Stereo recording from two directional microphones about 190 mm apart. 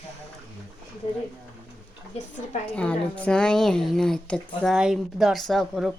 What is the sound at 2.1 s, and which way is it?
Speech, 35° left (ahead or behind).